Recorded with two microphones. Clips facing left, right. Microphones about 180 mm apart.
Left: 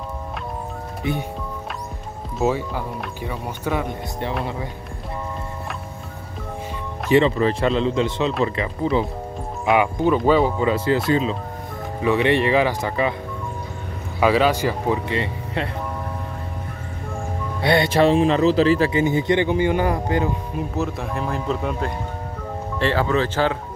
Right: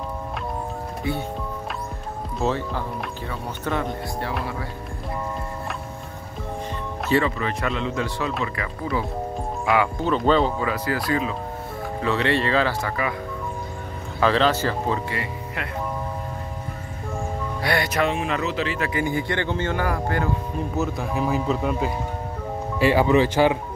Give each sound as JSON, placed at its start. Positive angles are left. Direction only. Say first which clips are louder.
{"t": 1.1, "sound": "speech", "louder": "left 2 dB", "side_deg": 20}
{"t": 2.3, "sound": "speech", "louder": "left 3 dB", "side_deg": 10}
{"t": 7.1, "sound": "speech", "louder": "left 5 dB", "side_deg": 20}
{"t": 7.3, "sound": "speech", "louder": "left 7 dB", "side_deg": 30}
{"t": 10.6, "sound": "speech", "louder": "left 6 dB", "side_deg": 25}
{"t": 14.2, "sound": "speech", "louder": "left 2 dB", "side_deg": 10}
{"t": 17.6, "sound": "speech", "louder": "left 6 dB", "side_deg": 25}
{"t": 18.9, "sound": "speech", "louder": "left 6 dB", "side_deg": 20}
{"t": 20.5, "sound": "speech", "louder": "even", "side_deg": 0}